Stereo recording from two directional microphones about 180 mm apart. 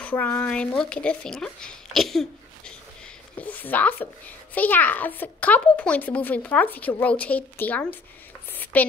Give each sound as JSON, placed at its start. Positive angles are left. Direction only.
{"t": 0.0, "sound": "a woman's voice", "side_deg": 10}